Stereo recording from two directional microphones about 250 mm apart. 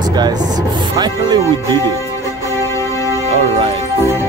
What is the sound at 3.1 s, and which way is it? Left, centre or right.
Music, right.